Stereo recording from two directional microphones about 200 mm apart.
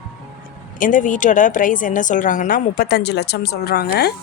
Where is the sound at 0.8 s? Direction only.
40° left (ahead or behind).